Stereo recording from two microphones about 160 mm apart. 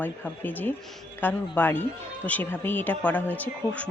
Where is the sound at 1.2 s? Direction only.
10° left (ahead or behind).